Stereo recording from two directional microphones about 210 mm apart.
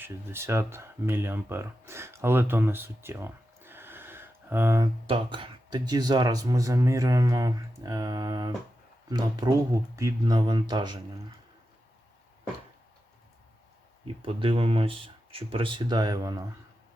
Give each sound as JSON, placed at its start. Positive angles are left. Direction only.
{"t": 0.0, "sound": "speech", "side_deg": -10}
{"t": 5.0, "sound": "speech", "side_deg": -25}
{"t": 14.2, "sound": "speech", "side_deg": -25}